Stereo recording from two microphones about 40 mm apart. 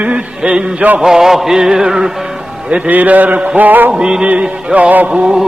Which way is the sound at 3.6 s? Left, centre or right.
Right.